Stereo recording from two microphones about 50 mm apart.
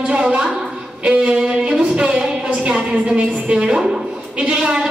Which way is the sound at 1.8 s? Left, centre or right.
Right.